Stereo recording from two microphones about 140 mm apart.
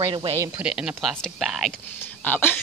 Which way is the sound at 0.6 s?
5° right (ahead or behind).